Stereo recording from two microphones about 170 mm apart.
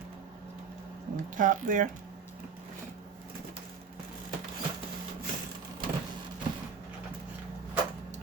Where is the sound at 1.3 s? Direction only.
50° right (ahead or behind).